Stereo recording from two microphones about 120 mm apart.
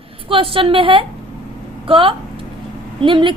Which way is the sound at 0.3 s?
50° right (ahead or behind).